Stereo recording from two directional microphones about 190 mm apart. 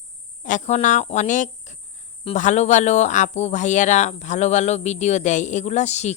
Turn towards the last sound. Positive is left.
turn(degrees=35)  # may be behind; listen again after turning